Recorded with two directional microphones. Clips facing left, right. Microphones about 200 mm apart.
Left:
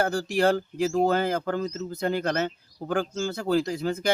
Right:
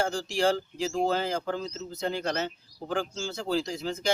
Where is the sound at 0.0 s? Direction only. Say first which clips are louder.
Left 3 dB; 55° left (ahead or behind).